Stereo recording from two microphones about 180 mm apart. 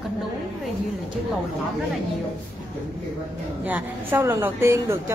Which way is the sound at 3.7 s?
10° right (ahead or behind).